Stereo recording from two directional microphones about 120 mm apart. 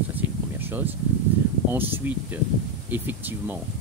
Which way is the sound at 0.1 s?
15° right (ahead or behind).